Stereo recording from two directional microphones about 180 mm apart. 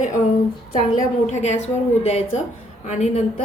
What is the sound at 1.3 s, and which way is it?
A woman's voice, 40° left (ahead or behind).